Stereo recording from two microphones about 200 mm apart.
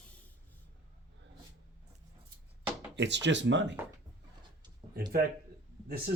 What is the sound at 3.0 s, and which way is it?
Speech, 60° right (ahead or behind).